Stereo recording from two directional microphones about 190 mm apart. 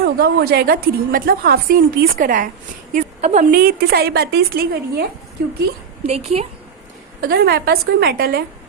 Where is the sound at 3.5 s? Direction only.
55° right (ahead or behind).